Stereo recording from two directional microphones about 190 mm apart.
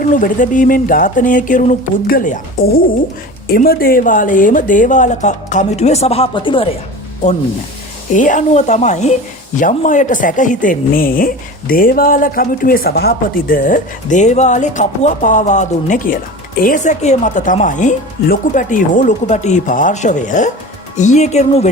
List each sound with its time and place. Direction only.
0.1 s speech: 45° left (ahead or behind); by 6.7 s 25° left (ahead or behind)
8.1 s speech: 45° left (ahead or behind)